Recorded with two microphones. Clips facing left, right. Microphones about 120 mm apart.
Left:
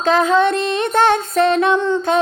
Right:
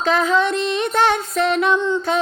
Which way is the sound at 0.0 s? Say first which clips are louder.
Left 3 dB; 45° left (ahead or behind).